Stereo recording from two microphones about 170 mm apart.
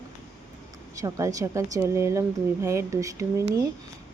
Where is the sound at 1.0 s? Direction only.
20° right (ahead or behind).